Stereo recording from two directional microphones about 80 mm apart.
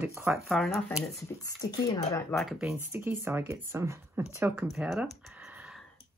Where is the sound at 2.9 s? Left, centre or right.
Right.